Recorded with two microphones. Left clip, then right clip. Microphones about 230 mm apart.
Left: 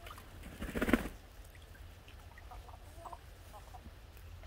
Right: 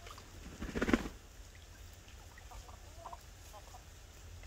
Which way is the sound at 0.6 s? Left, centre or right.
Left.